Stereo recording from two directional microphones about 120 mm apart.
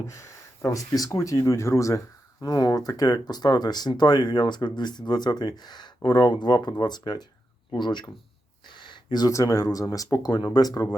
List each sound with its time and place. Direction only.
0.0 s speech: 25° left (ahead or behind)